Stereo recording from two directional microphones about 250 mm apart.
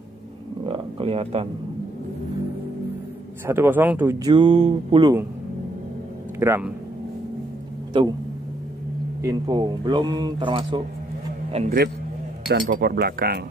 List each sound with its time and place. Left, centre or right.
0.7 s a sound: right
3.4 s speech: centre
6.4 s speech: centre
9.2 s a man's voice: centre
12.4 s speech: right